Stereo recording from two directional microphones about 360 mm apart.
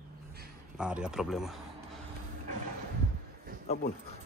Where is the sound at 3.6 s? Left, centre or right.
Left.